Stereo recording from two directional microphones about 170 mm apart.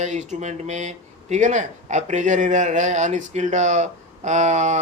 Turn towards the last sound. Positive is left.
turn(degrees=-45)  # may be behind; listen again after turning